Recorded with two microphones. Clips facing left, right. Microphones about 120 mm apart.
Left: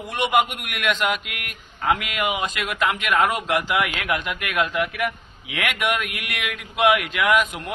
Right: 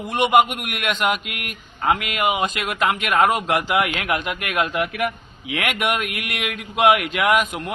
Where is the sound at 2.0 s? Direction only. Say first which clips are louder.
Right 3 dB; 50° right (ahead or behind).